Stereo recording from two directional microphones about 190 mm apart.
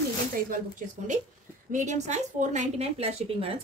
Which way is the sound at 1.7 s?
40° right (ahead or behind).